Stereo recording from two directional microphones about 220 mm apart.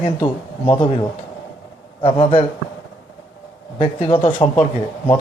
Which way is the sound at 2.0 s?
25° left (ahead or behind).